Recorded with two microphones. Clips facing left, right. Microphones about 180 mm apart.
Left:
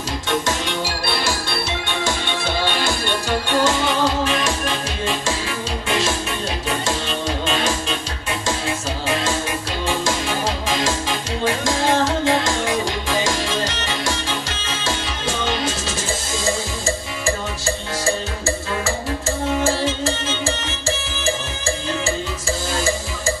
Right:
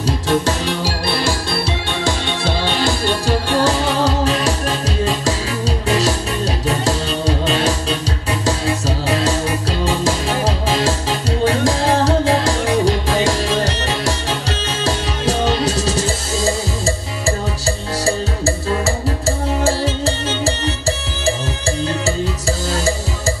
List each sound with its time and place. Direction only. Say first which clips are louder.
0.3 s music: right 4 dB; 35° right (ahead or behind)
17.6 s music: right 2 dB; 35° right (ahead or behind)